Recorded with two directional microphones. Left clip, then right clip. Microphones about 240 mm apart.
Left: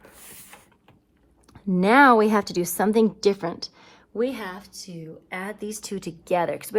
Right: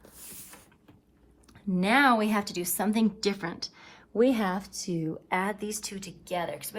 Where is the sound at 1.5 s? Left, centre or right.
Left.